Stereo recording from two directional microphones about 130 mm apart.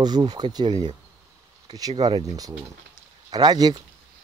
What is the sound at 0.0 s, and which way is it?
Speech, 30° right (ahead or behind).